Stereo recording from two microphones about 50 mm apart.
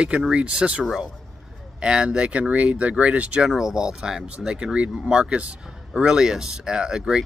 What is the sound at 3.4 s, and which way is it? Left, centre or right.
Speech, centre.